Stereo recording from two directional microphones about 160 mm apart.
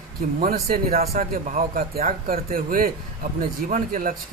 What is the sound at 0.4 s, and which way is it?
Speech, 70° right (ahead or behind).